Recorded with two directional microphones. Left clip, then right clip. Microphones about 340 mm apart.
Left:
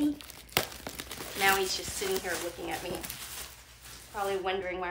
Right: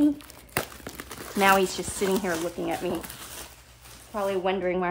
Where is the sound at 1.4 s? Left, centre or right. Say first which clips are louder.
Right 6 dB; centre.